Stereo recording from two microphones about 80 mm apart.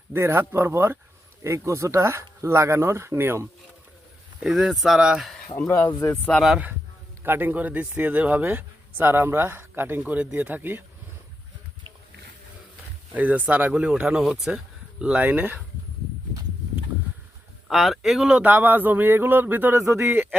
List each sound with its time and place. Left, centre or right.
0.1 s speech: right
4.4 s speech: centre
5.5 s speech: left
7.3 s speech: right
13.1 s speech: centre
15.1 s speech: right
17.7 s speech: centre
18.4 s speech: right